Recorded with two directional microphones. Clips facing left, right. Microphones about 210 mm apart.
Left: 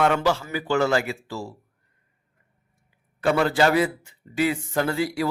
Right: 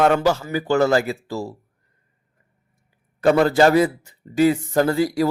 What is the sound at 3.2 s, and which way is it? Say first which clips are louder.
A man's voice: right 5 dB; 40° right (ahead or behind).